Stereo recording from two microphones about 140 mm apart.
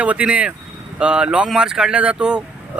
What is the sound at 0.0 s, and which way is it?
Speech, 10° right (ahead or behind).